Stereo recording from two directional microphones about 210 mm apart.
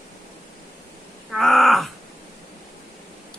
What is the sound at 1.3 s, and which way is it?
Groan, centre (ahead or behind).